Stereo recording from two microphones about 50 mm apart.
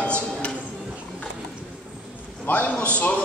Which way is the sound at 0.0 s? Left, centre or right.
Left.